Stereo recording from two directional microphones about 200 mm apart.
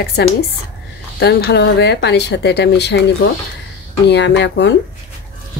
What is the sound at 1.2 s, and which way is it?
A woman's voice, 60° left (ahead or behind).